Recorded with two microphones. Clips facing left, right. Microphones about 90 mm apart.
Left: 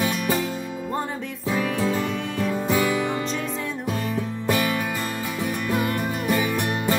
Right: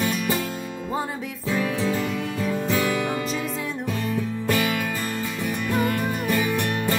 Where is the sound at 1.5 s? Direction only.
Centre (ahead or behind).